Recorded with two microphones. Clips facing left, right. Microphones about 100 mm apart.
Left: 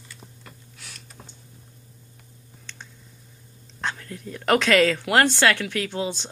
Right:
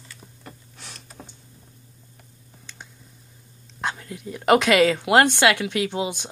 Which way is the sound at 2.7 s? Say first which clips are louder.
Even; 10° right (ahead or behind).